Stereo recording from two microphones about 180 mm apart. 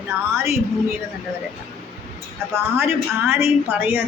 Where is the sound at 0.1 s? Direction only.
10° right (ahead or behind).